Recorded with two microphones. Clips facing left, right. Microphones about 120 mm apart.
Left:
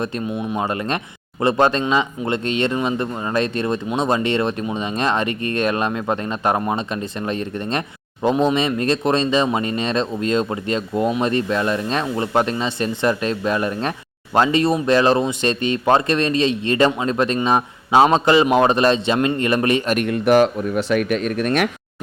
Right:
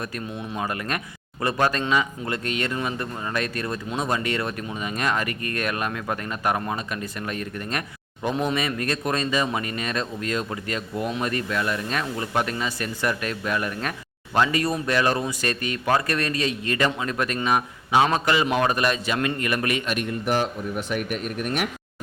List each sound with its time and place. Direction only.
0.0 s speech: 25° left (ahead or behind)
20.1 s speech: 80° left